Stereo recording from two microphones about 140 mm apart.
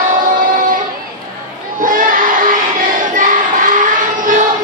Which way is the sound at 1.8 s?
75° right (ahead or behind).